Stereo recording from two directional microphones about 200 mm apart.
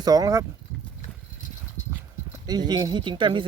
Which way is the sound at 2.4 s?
20° right (ahead or behind).